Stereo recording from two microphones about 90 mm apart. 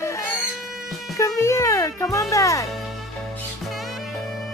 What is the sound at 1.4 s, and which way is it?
Speech, 30° left (ahead or behind).